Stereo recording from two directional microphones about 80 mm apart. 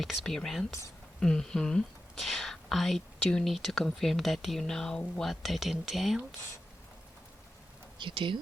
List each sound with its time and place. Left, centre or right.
0.0 s speech: centre
7.9 s speech: right